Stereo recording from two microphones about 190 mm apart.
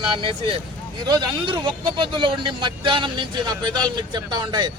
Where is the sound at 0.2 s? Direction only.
25° right (ahead or behind).